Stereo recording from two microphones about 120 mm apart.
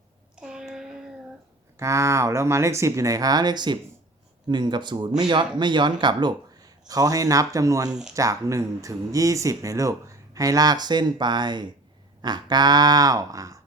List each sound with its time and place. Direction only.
0.3 s a sound: 5° right (ahead or behind)
1.8 s a man's voice: 25° right (ahead or behind)
7.9 s speech: 5° right (ahead or behind)
8.1 s a man's voice: 25° right (ahead or behind)